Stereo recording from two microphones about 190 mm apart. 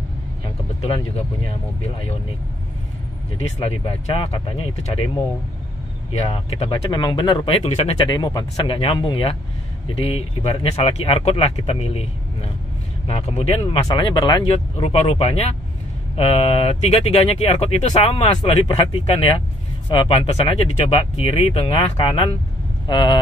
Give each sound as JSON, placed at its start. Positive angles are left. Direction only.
{"t": 0.8, "sound": "speech", "side_deg": 30}
{"t": 3.3, "sound": "speech", "side_deg": 30}
{"t": 6.2, "sound": "speech", "side_deg": 25}
{"t": 7.6, "sound": "speech", "side_deg": 35}
{"t": 8.1, "sound": "speech", "side_deg": 20}